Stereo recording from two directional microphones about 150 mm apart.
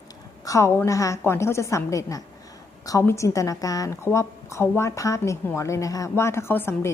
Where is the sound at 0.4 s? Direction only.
20° left (ahead or behind).